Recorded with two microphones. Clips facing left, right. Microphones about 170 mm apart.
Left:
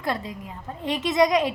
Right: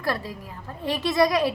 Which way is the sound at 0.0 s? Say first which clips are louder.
Even; 20° left (ahead or behind).